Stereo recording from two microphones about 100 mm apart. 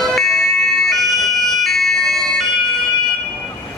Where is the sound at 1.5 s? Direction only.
Centre (ahead or behind).